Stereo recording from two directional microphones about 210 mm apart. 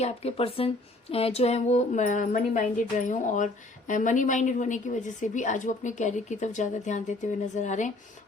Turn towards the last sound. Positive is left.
turn(degrees=35)  # may be behind; listen again after turning